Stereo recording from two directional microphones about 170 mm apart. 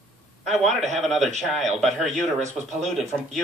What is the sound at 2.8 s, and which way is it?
Speech, centre (ahead or behind).